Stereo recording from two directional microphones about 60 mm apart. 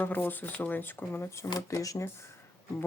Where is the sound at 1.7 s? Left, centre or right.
Left.